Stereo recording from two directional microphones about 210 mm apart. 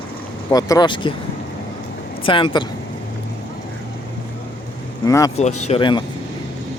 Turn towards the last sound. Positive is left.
turn(degrees=20)  # may be behind; listen again after turning